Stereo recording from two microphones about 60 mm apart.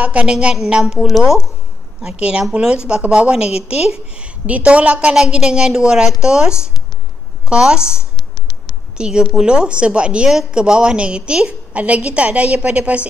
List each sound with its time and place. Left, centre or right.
0.0 s a woman's voice: right; by 1.4 s centre
2.0 s a woman's voice: centre